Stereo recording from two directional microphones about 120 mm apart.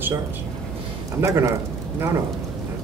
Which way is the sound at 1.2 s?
25° right (ahead or behind).